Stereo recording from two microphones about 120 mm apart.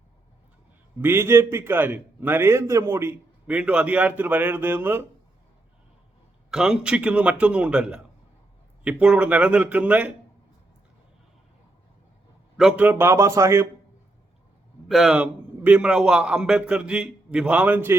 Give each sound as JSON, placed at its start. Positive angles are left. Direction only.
{"t": 1.0, "sound": "a man's voice", "side_deg": -20}
{"t": 6.5, "sound": "a man's voice", "side_deg": -5}
{"t": 12.5, "sound": "a man's voice", "side_deg": -5}
{"t": 12.8, "sound": "speech", "side_deg": -20}
{"t": 14.8, "sound": "a man's voice", "side_deg": 0}